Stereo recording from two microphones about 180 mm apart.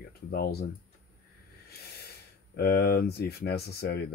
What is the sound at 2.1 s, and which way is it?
Speech, 60° left (ahead or behind).